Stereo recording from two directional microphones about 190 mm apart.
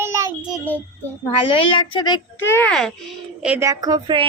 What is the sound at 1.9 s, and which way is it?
Speech, 25° left (ahead or behind).